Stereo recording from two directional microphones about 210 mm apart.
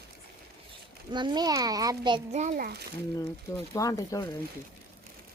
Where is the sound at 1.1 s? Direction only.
20° right (ahead or behind).